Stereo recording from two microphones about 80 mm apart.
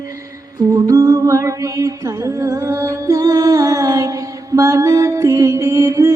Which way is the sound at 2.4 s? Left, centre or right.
Right.